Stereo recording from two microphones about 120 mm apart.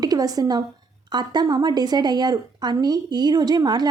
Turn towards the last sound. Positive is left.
turn(degrees=-35)  # may be behind; listen again after turning